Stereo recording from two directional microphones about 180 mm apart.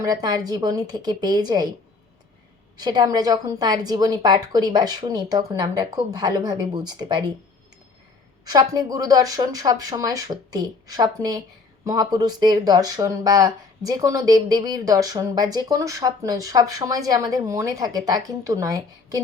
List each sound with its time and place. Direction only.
0.0 s speech: 20° right (ahead or behind)
2.7 s speech: 20° right (ahead or behind)
8.4 s speech: 20° right (ahead or behind)